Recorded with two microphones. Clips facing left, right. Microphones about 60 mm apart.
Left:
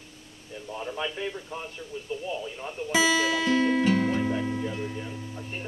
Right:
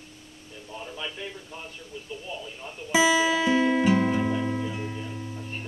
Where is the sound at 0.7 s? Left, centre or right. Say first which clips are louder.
Left 4 dB; left.